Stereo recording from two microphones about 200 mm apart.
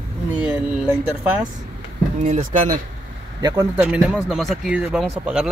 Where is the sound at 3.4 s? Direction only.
15° right (ahead or behind).